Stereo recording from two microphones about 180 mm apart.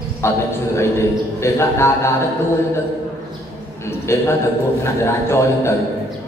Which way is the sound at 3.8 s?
15° left (ahead or behind).